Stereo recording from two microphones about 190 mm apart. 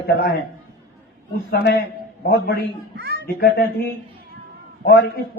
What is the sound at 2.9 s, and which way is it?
Babbling, 60° right (ahead or behind).